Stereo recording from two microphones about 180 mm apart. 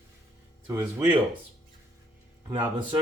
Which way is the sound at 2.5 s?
10° right (ahead or behind).